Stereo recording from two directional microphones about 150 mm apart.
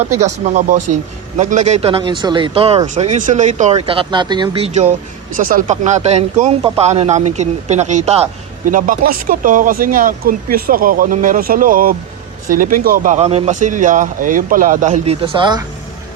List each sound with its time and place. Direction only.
0.2 s speech: 50° right (ahead or behind)
3.8 s speech: 35° right (ahead or behind)
5.5 s speech: 60° right (ahead or behind)
8.6 s speech: 65° right (ahead or behind)
13.1 s speech: 45° right (ahead or behind); by 15.6 s 30° right (ahead or behind)